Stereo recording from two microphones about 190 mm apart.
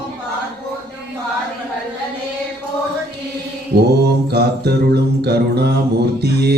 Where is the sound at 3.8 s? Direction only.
60° right (ahead or behind).